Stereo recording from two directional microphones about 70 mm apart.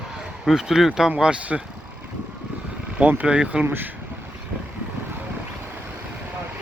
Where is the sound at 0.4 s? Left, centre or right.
Centre.